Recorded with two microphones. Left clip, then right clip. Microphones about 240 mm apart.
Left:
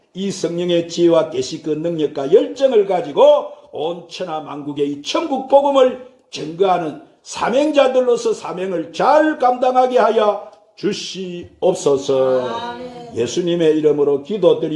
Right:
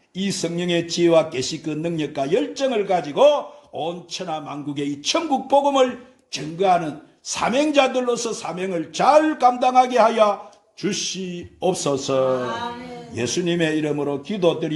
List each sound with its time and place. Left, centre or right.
0.2 s a man's voice: right